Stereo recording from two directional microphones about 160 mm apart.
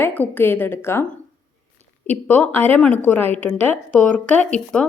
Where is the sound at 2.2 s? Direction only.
10° left (ahead or behind).